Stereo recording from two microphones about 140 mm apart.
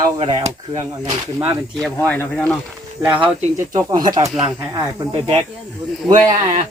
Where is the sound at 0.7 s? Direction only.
25° right (ahead or behind).